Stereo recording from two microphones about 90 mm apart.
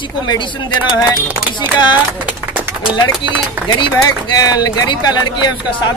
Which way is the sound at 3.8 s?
65° left (ahead or behind).